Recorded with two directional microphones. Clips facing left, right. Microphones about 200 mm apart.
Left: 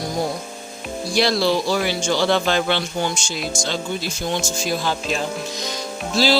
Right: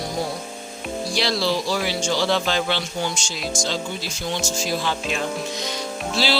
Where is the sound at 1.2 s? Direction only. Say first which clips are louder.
Left 5 dB; 50° left (ahead or behind).